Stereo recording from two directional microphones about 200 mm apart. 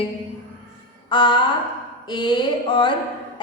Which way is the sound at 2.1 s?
20° left (ahead or behind).